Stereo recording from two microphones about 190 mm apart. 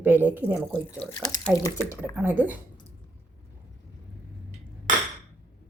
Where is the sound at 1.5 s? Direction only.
15° left (ahead or behind).